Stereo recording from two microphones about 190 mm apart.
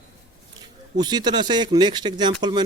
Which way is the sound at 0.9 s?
20° right (ahead or behind).